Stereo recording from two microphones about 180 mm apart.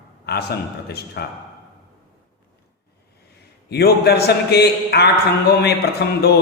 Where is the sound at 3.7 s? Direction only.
65° left (ahead or behind).